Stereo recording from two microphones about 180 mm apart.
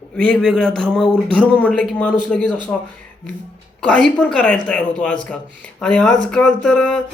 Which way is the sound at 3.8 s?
5° left (ahead or behind).